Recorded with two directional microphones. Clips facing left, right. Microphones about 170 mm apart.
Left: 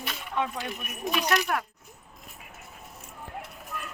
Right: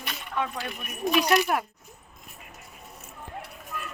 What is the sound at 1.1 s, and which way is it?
Speech, 10° right (ahead or behind).